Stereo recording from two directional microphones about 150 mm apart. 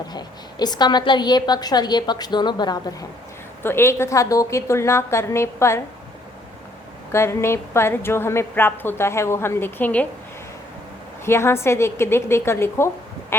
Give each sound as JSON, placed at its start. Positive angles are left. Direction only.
{"t": 0.1, "sound": "a woman's voice", "side_deg": 25}
{"t": 3.6, "sound": "a woman's voice", "side_deg": 15}
{"t": 7.1, "sound": "a woman's voice", "side_deg": 15}
{"t": 11.3, "sound": "a woman's voice", "side_deg": 15}